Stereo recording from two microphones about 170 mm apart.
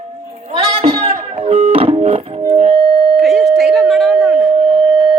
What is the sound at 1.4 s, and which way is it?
Music, 35° right (ahead or behind).